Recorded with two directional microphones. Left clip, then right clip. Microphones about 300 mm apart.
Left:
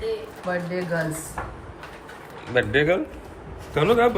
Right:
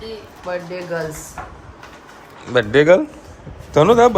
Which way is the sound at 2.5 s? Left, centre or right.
Centre.